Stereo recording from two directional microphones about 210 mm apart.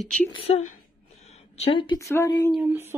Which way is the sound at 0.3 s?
30° left (ahead or behind).